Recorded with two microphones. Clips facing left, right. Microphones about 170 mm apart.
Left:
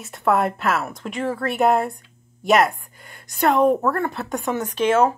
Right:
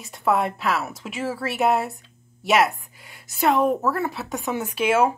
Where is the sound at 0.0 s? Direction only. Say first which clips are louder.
Left 2 dB; centre (ahead or behind).